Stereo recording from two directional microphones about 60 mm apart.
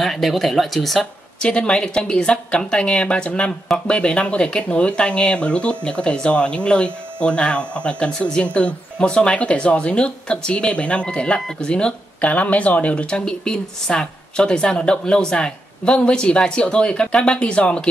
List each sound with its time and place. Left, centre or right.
0.0 s speech: centre
1.4 s speech: centre